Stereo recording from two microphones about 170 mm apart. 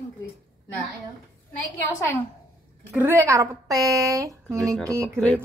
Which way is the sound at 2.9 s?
10° right (ahead or behind).